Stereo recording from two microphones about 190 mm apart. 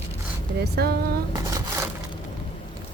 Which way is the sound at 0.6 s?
55° right (ahead or behind).